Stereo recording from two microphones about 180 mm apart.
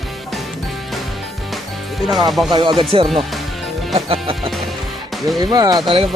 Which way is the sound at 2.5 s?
25° right (ahead or behind).